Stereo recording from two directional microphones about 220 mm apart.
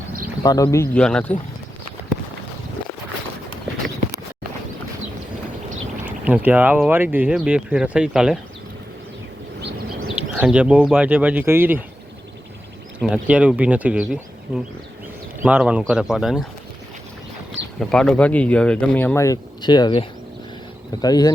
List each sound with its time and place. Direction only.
0.4 s speech: 15° left (ahead or behind)
6.1 s speech: 5° right (ahead or behind)
9.6 s bird: 50° right (ahead or behind)
10.4 s speech: 5° right (ahead or behind)
13.0 s speech: 5° right (ahead or behind)
17.7 s speech: 5° left (ahead or behind)